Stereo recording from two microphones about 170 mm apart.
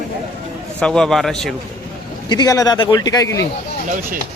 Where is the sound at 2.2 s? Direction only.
25° left (ahead or behind).